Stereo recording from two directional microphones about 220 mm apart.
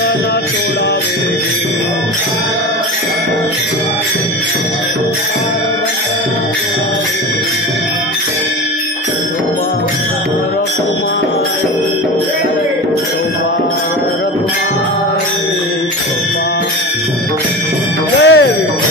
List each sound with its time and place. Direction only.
18.2 s music: 60° left (ahead or behind)